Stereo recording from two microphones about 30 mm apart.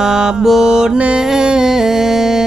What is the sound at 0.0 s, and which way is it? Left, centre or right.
Mantra, right.